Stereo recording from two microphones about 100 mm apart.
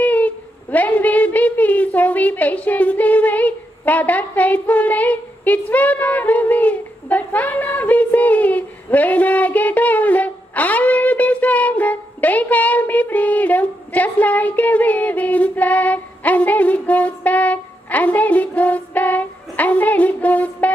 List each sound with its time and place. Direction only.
0.0 s a woman's voice: 15° left (ahead or behind)